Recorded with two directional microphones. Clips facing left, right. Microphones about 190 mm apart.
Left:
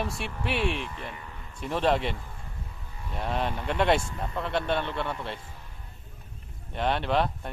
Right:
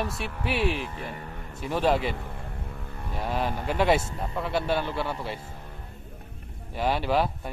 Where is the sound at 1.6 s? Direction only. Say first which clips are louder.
Right 1 dB; centre (ahead or behind).